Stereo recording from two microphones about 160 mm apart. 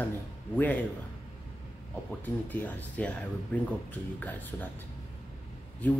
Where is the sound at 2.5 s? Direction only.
10° left (ahead or behind).